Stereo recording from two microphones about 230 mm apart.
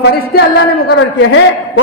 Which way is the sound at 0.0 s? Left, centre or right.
Left.